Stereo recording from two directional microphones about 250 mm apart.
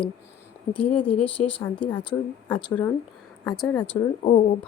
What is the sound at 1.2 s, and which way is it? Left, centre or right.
Speech, left.